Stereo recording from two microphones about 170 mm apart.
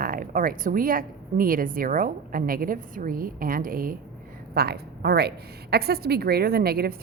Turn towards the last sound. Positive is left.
turn(degrees=-65)  # may be behind; listen again after turning